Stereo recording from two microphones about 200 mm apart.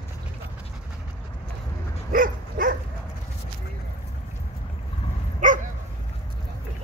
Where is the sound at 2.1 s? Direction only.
45° right (ahead or behind).